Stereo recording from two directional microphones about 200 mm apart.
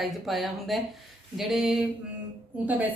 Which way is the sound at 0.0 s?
Centre (ahead or behind).